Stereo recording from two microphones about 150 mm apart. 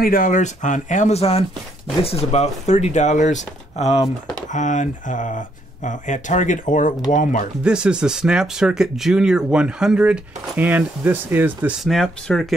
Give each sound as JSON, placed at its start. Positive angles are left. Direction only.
{"t": 0.0, "sound": "speech", "side_deg": 65}
{"t": 7.6, "sound": "speech", "side_deg": -5}
{"t": 11.8, "sound": "speech", "side_deg": 0}